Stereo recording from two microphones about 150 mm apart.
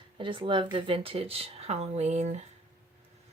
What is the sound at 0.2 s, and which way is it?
Speech, 35° right (ahead or behind).